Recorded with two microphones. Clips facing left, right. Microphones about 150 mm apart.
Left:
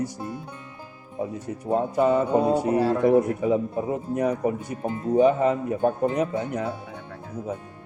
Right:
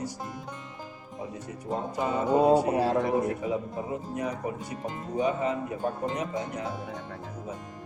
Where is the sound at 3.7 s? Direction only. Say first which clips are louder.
Left 6 dB; 55° left (ahead or behind).